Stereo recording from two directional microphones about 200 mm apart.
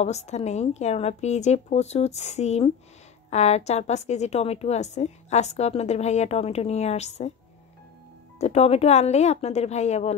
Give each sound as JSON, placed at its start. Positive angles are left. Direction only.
{"t": 0.0, "sound": "a woman's voice", "side_deg": 35}
{"t": 8.4, "sound": "a woman's voice", "side_deg": 30}